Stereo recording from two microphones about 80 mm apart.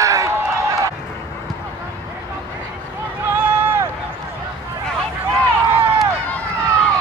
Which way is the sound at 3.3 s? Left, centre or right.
Right.